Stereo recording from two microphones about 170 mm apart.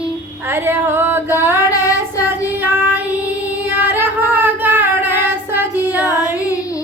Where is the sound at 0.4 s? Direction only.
15° right (ahead or behind).